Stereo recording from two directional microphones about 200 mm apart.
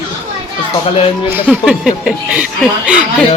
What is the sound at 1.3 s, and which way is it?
Speech, 5° right (ahead or behind).